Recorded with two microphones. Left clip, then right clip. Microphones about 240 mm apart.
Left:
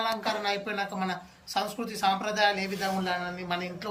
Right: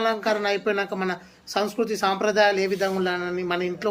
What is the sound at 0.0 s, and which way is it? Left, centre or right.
Speech, centre.